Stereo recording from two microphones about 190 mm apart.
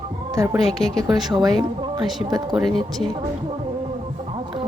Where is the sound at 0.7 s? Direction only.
Centre (ahead or behind).